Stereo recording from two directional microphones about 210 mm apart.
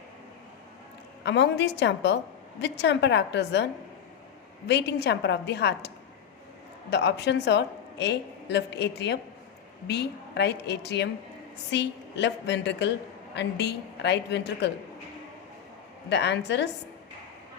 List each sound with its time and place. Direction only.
1.2 s a woman's voice: 55° left (ahead or behind)
6.9 s a woman's voice: 55° left (ahead or behind)
16.0 s a woman's voice: 55° left (ahead or behind)